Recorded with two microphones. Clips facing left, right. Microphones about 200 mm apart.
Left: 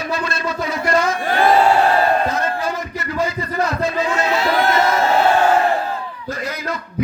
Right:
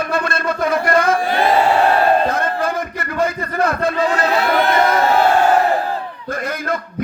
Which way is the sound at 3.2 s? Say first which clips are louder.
Right 2 dB; 55° right (ahead or behind).